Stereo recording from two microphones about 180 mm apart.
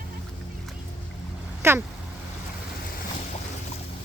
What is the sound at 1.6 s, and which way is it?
Speech, 15° right (ahead or behind).